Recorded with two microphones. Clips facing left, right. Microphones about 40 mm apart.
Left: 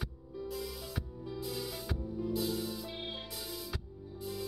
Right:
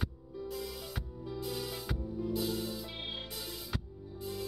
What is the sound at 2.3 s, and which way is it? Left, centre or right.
Music, right.